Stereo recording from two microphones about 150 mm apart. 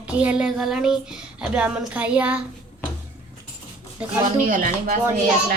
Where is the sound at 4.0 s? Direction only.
10° right (ahead or behind).